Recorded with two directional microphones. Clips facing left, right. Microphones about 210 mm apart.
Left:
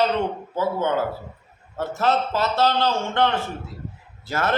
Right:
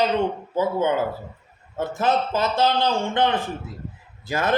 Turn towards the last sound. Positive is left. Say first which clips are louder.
# right 1 dB
turn(degrees=-15)  # may be behind; listen again after turning